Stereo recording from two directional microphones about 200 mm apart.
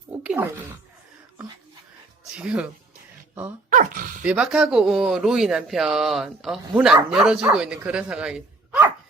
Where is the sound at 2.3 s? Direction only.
5° right (ahead or behind).